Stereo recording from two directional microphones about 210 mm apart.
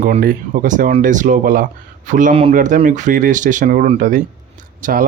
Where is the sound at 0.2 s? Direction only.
40° right (ahead or behind).